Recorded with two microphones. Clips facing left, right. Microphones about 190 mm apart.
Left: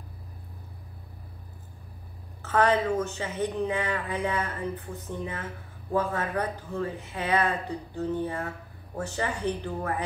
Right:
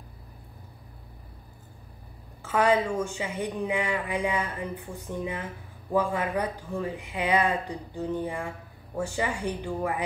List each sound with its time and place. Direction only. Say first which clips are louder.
2.4 s speech: even; 10° right (ahead or behind)